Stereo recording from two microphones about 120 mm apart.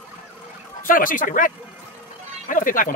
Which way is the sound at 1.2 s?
90° left.